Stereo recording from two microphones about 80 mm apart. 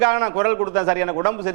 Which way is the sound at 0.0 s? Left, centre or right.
Centre.